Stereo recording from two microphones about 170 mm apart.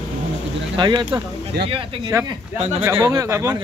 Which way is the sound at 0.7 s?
25° right (ahead or behind).